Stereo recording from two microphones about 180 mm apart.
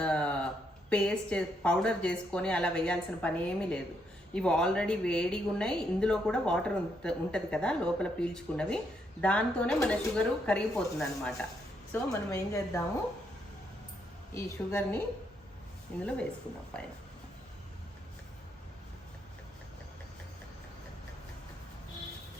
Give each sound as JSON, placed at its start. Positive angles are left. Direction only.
{"t": 0.0, "sound": "a woman's voice", "side_deg": 5}
{"t": 11.9, "sound": "a woman's voice", "side_deg": 15}
{"t": 14.3, "sound": "a woman's voice", "side_deg": 10}